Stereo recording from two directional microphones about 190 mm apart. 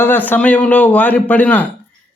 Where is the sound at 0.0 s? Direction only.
10° left (ahead or behind).